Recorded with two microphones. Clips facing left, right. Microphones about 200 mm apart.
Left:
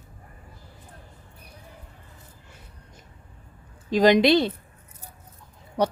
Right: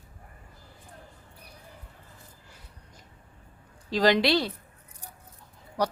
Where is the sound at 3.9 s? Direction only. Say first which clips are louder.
Left 5 dB; 20° left (ahead or behind).